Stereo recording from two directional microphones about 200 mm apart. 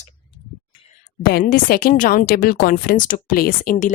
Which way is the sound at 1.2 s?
50° left (ahead or behind).